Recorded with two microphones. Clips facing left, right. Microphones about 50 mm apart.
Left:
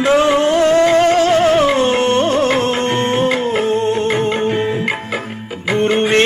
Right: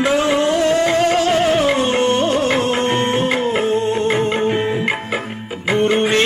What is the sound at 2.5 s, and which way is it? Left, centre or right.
Music, centre.